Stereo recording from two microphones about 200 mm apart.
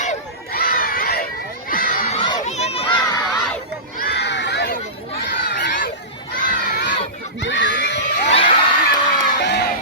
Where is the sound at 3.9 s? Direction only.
55° left (ahead or behind).